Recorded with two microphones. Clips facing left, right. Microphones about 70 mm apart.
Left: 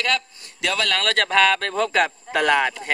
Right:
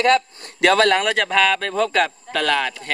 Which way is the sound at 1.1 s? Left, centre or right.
Centre.